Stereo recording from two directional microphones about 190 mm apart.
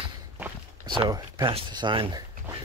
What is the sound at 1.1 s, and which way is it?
Speech, 25° right (ahead or behind).